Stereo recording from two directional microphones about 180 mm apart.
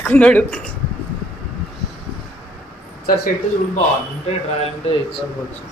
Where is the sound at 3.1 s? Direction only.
55° left (ahead or behind).